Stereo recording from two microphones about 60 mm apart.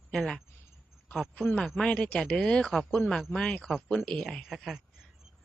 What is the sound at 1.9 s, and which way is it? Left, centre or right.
Speech, left.